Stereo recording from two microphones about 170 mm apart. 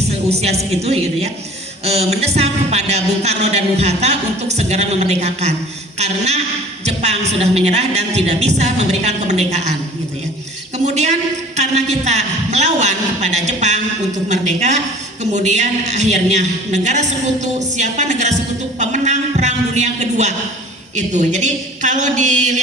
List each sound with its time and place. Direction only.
0.1 s a woman's voice: 40° right (ahead or behind)
10.8 s a woman's voice: 40° right (ahead or behind)